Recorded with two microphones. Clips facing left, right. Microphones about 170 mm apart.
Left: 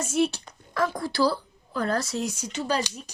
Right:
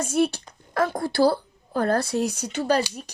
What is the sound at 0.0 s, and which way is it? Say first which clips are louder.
Speech: right 2 dB; 55° right (ahead or behind).